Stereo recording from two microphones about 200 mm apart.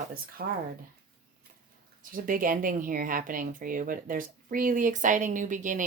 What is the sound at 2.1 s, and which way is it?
Speech, 45° right (ahead or behind).